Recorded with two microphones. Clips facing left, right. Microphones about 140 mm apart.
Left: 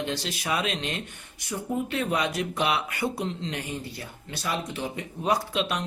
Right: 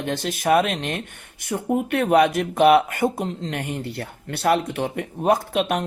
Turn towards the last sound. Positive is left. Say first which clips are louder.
# right 5 dB
turn(degrees=-50)  # may be behind; listen again after turning